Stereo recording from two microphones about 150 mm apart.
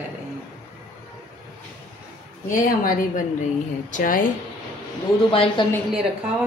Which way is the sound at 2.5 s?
65° left (ahead or behind).